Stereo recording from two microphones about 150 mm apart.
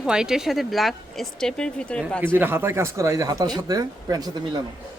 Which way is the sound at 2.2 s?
15° right (ahead or behind).